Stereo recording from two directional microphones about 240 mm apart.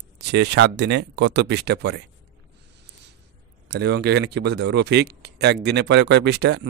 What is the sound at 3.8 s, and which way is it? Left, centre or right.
Speech, right.